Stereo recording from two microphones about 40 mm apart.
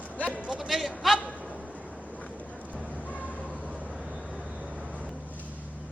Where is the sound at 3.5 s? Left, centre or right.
Centre.